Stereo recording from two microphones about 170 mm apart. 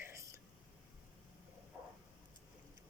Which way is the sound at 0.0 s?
15° right (ahead or behind).